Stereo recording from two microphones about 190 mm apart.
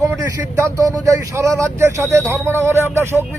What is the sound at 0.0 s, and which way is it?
Speech, 15° right (ahead or behind).